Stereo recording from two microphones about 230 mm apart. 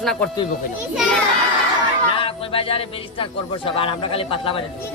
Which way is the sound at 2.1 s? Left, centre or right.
Left.